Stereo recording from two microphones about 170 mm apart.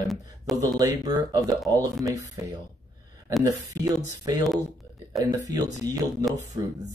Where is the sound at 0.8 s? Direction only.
20° right (ahead or behind).